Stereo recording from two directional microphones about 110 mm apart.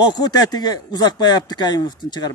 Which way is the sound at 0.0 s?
40° left (ahead or behind).